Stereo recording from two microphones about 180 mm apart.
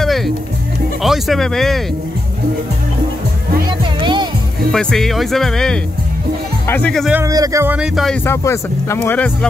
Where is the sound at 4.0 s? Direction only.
25° right (ahead or behind).